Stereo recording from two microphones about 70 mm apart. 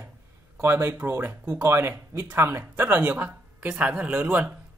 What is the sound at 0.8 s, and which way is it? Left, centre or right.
Speech, right.